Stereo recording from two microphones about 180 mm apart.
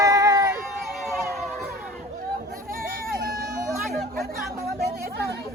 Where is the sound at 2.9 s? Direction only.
55° right (ahead or behind).